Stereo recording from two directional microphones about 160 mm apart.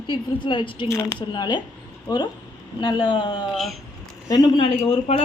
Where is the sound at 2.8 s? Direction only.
30° left (ahead or behind).